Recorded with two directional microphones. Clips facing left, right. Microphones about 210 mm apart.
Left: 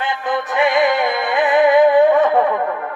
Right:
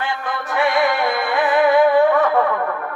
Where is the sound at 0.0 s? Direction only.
20° left (ahead or behind).